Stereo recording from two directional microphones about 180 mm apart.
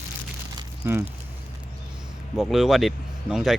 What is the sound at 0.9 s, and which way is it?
Speech, 15° right (ahead or behind).